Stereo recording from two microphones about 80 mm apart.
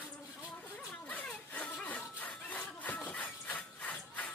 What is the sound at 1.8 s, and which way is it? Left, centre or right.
Wood, centre.